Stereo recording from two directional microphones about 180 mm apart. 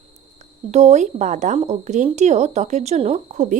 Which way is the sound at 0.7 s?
40° right (ahead or behind).